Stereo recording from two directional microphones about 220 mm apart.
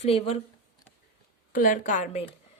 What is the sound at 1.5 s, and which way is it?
Speech, 40° left (ahead or behind).